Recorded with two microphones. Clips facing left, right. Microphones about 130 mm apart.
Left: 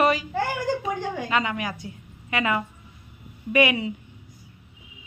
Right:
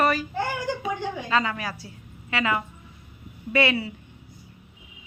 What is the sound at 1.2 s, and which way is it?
A woman's voice, 20° left (ahead or behind).